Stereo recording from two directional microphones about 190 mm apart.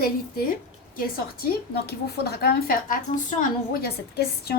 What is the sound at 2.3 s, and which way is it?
A woman's voice, 50° left (ahead or behind).